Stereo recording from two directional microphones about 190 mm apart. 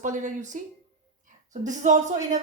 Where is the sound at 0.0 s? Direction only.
40° right (ahead or behind).